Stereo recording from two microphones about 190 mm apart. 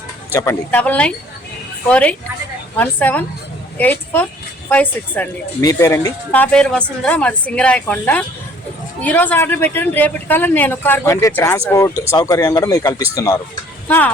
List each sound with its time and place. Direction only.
0.3 s speech: 10° left (ahead or behind)